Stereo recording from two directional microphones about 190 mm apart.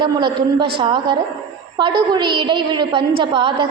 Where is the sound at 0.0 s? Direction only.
25° right (ahead or behind).